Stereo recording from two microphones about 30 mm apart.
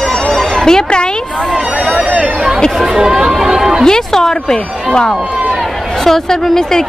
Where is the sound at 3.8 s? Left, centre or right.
Centre.